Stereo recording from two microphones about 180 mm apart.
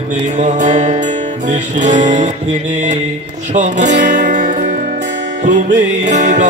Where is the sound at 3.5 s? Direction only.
40° right (ahead or behind).